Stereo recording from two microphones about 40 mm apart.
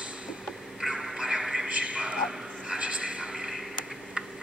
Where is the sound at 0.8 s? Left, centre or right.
Centre.